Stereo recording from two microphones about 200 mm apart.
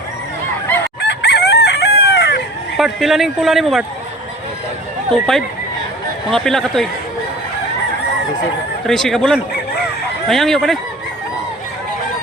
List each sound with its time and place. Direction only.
1.0 s chicken: 55° left (ahead or behind)
2.7 s speech: centre (ahead or behind)
6.3 s speech: centre (ahead or behind)
8.9 s speech: centre (ahead or behind)